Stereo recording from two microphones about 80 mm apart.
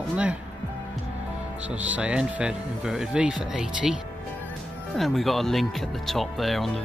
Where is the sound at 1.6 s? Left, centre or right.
Centre.